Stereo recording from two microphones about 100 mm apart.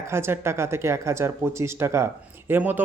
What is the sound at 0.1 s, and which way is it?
Speech, 25° right (ahead or behind).